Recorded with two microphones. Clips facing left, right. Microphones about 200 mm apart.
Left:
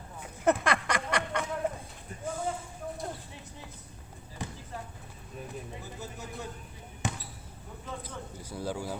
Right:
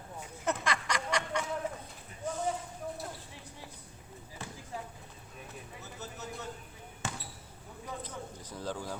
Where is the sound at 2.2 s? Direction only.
10° left (ahead or behind).